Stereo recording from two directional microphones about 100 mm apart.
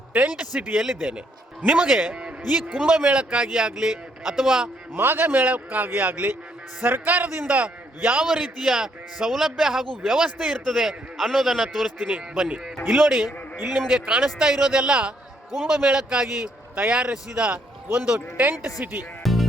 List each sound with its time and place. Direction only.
0.1 s a man's voice: 15° right (ahead or behind)
4.9 s a man's voice: 20° right (ahead or behind)
19.2 s music: centre (ahead or behind)